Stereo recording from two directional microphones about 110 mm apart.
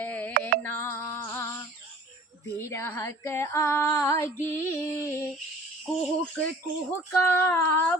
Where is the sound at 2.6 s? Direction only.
25° left (ahead or behind).